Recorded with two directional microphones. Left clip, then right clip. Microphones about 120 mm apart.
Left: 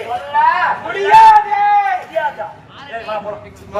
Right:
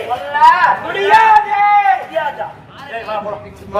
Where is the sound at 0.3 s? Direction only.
20° right (ahead or behind).